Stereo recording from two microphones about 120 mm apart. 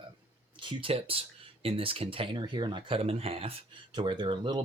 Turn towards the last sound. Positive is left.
turn(degrees=-40)  # may be behind; listen again after turning